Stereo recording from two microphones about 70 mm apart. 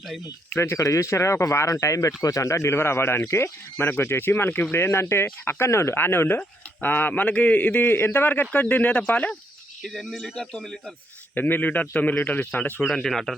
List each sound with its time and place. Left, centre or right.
0.5 s a man's voice: left
9.8 s speech: centre
11.3 s a man's voice: left
12.9 s speech: centre